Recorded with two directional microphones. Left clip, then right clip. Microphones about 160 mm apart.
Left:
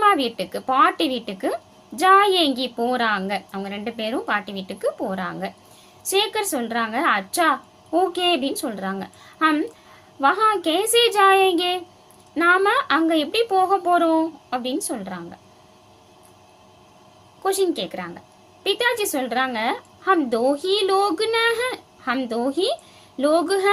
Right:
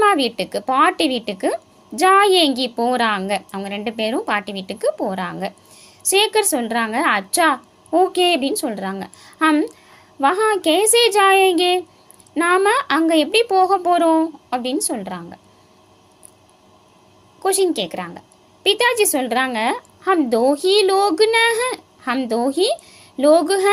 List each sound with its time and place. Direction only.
0.0 s a woman's voice: 35° right (ahead or behind)
17.4 s a woman's voice: 30° right (ahead or behind)